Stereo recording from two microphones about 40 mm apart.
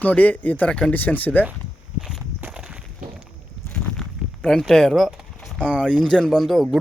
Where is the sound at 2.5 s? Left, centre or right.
Right.